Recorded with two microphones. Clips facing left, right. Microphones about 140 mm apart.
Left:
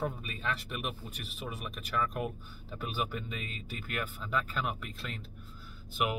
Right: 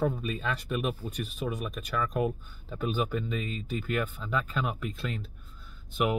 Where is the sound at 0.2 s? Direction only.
Centre (ahead or behind).